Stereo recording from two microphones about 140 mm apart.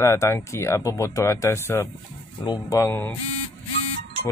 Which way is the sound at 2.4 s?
30° left (ahead or behind).